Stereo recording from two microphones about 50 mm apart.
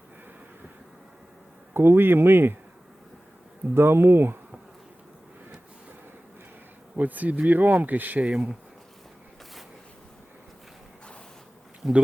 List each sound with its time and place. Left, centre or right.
1.7 s speech: right
3.8 s speech: right
6.9 s speech: right
8.3 s speech: right
11.8 s speech: centre